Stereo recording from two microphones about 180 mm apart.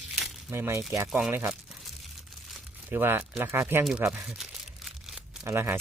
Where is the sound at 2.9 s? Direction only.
10° right (ahead or behind).